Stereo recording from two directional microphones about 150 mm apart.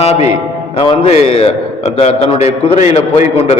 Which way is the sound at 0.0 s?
45° left (ahead or behind).